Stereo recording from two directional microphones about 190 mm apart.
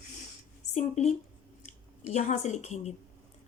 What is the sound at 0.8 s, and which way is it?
Speech, 35° left (ahead or behind).